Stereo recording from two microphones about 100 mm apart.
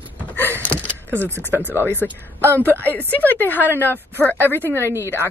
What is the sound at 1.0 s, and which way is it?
Speech, 25° right (ahead or behind).